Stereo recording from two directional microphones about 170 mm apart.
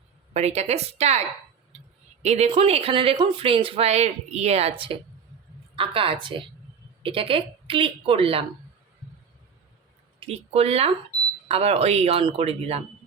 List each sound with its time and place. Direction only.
0.3 s speech: 40° right (ahead or behind)
2.2 s speech: 40° right (ahead or behind)
10.2 s speech: 35° right (ahead or behind)